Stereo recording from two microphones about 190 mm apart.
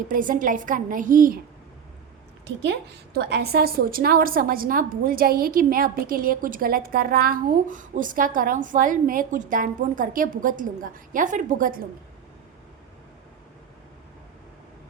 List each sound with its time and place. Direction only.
0.1 s a woman's voice: 45° right (ahead or behind)
2.6 s a woman's voice: 65° right (ahead or behind); by 11.8 s 45° right (ahead or behind)